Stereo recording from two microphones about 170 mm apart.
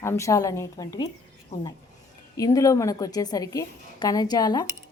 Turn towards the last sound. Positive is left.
turn(degrees=25)  # may be behind; listen again after turning